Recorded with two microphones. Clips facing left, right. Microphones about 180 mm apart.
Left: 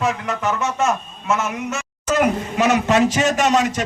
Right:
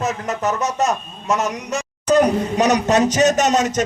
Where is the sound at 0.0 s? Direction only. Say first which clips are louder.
Even; 40° right (ahead or behind).